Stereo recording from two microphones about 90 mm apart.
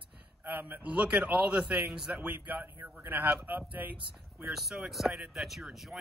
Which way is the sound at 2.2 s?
20° right (ahead or behind).